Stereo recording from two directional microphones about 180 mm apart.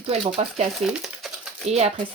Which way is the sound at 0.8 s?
Centre (ahead or behind).